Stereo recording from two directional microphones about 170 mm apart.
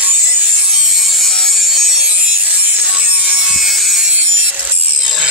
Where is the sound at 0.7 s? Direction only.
Centre (ahead or behind).